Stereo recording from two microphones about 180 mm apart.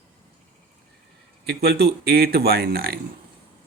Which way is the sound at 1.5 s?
60° right (ahead or behind).